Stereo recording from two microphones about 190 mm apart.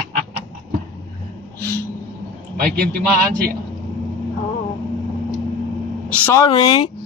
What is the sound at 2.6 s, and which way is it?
Speech, 55° right (ahead or behind).